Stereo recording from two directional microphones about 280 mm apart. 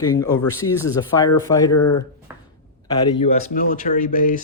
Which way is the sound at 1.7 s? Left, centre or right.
Left.